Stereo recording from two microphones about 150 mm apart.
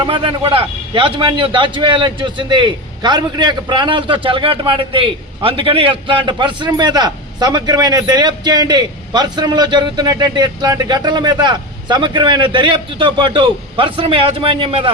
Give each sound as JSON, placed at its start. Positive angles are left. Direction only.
{"t": 0.0, "sound": "a man's voice", "side_deg": -35}